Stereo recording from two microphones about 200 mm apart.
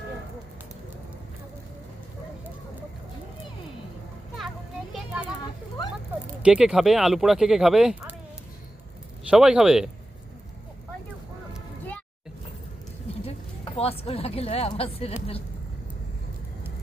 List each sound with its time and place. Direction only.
4.4 s children playing: centre (ahead or behind)
6.4 s speech: 5° right (ahead or behind)
9.3 s speech: 5° right (ahead or behind)
13.2 s a woman's voice: 30° left (ahead or behind)